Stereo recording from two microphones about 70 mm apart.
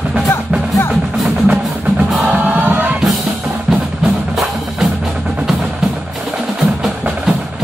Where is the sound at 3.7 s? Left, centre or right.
Centre.